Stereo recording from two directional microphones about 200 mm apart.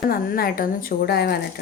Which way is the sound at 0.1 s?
45° left (ahead or behind).